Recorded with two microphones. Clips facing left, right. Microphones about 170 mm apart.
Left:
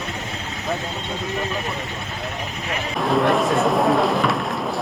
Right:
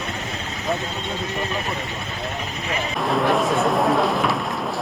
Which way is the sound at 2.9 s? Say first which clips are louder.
Left 2 dB; centre (ahead or behind).